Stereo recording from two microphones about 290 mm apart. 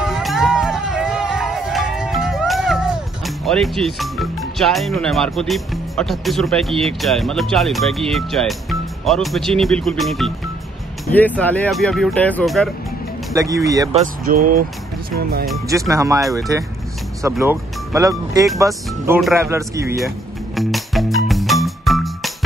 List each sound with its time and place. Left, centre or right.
0.0 s music: centre
11.1 s speech: centre
13.3 s speech: centre
14.5 s speech: right
15.9 s speech: centre
20.5 s music: centre